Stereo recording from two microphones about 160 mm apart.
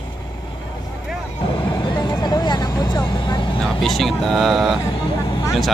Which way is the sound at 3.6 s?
Centre (ahead or behind).